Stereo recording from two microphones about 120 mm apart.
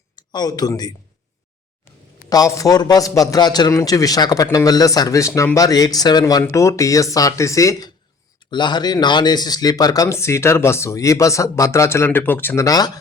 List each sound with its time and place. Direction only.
0.3 s a man's voice: 35° left (ahead or behind)
2.3 s a man's voice: 30° left (ahead or behind)
12.6 s a man's voice: 35° left (ahead or behind)